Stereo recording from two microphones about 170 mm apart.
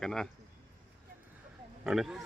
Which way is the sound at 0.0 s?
5° left (ahead or behind).